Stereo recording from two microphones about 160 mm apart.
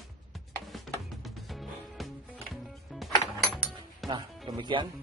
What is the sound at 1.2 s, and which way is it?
Music, centre (ahead or behind).